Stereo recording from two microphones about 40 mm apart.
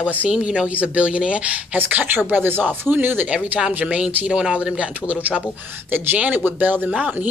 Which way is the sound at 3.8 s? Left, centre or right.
Right.